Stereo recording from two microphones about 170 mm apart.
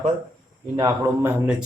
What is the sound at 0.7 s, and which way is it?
Speech, 20° right (ahead or behind).